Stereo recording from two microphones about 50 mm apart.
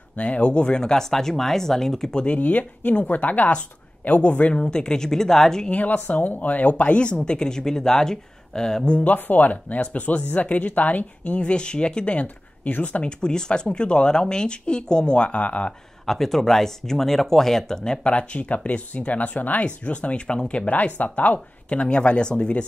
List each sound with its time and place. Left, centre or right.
0.1 s speech: left; by 2.2 s centre
2.2 s speech: left
4.6 s speech: centre
5.7 s speech: left; by 9.0 s centre
9.0 s speech: left
12.6 s speech: left
13.2 s speech: centre
16.1 s speech: centre
18.0 s speech: left
20.7 s speech: left